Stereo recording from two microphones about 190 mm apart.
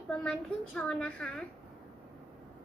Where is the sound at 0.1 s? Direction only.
5° left (ahead or behind).